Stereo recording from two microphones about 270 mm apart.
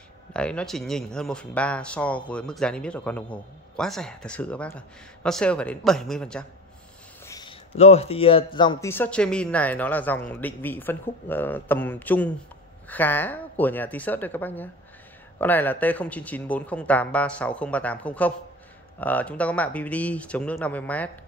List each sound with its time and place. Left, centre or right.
0.3 s speech: centre
7.2 s a sound: centre
8.5 s speech: centre